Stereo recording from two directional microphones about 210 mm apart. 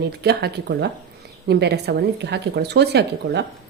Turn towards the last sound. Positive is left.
turn(degrees=-50)  # may be behind; listen again after turning